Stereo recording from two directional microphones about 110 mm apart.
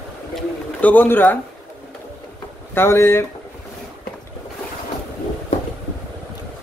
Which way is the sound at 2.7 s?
20° left (ahead or behind).